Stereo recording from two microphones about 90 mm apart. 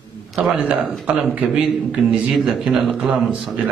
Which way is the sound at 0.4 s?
10° right (ahead or behind).